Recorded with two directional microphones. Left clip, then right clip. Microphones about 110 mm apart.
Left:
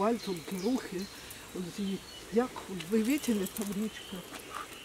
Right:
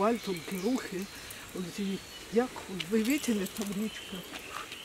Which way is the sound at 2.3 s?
5° left (ahead or behind).